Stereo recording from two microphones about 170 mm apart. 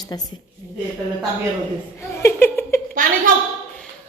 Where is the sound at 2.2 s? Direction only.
15° left (ahead or behind).